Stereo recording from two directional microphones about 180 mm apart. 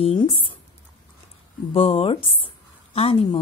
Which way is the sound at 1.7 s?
30° left (ahead or behind).